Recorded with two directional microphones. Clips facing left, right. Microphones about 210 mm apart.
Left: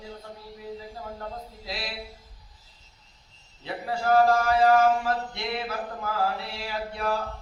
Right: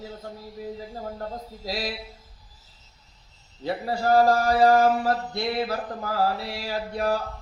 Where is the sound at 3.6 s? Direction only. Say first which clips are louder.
Right 3 dB; 40° right (ahead or behind).